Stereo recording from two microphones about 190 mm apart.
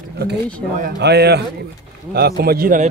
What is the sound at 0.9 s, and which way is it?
A man's voice, 60° right (ahead or behind).